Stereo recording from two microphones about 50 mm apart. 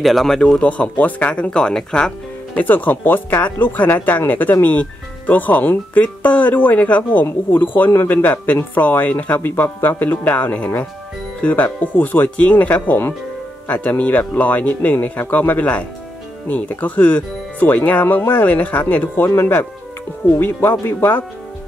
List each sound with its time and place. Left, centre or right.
0.0 s a man's voice: centre
0.4 s speech: left
2.5 s speech: left
9.4 s speech: left
19.2 s speech: left
20.3 s speech: left